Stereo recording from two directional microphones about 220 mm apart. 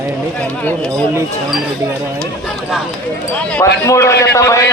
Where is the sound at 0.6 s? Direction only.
5° left (ahead or behind).